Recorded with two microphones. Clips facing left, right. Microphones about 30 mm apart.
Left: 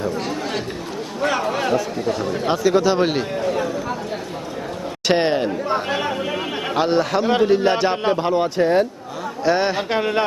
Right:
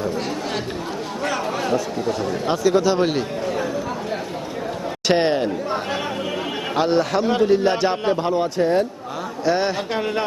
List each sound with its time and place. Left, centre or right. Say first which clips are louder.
1.7 s speech: left 1 dB; centre
5.0 s speech: even; centre
6.7 s speech: even; centre
8.1 s speech: left 1 dB; left
9.9 s speech: left 3 dB; left